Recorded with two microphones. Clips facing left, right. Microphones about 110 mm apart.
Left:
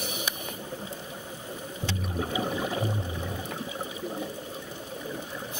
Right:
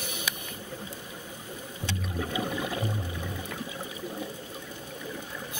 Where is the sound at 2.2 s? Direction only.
30° left (ahead or behind).